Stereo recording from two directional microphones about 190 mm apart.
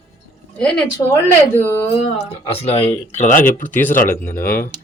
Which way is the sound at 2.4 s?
30° left (ahead or behind).